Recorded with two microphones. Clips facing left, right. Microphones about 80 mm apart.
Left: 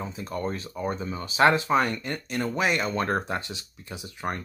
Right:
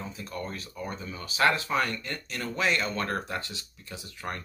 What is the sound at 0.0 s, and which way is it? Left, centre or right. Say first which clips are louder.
Speech: left 6 dB; left.